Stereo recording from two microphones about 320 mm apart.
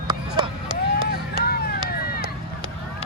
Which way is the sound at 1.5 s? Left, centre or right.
Left.